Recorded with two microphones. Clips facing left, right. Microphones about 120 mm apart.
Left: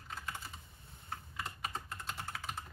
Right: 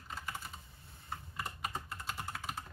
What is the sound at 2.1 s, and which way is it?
Computer keyboard, 5° right (ahead or behind).